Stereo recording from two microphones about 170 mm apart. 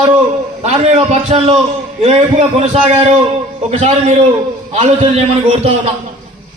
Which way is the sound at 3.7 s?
40° right (ahead or behind).